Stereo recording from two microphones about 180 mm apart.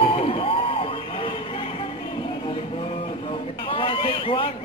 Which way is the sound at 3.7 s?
30° left (ahead or behind).